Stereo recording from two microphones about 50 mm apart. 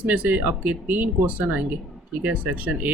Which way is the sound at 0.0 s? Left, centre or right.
Right.